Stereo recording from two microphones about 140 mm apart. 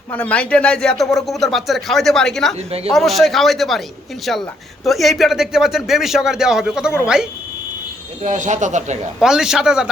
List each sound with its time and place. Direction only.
0.1 s a man's voice: 10° left (ahead or behind); by 7.3 s 5° right (ahead or behind)
8.2 s speech: 65° right (ahead or behind)
9.2 s a man's voice: 5° right (ahead or behind)